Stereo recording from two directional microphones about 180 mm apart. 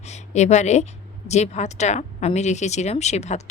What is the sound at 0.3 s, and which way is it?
A woman's voice, 40° left (ahead or behind).